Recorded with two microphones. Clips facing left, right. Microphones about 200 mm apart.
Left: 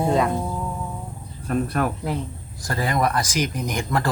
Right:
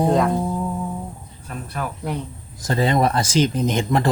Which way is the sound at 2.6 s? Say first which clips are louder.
Right 4 dB; 25° right (ahead or behind).